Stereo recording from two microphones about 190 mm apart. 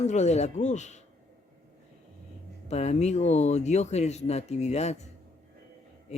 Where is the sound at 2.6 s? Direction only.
35° left (ahead or behind).